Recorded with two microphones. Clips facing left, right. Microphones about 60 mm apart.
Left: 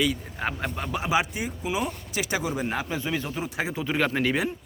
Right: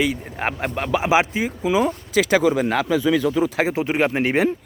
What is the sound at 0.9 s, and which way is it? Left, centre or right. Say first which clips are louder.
Speech: right 7 dB; right.